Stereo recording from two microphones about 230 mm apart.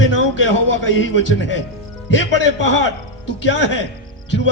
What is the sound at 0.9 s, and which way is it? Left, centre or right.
Speech, left.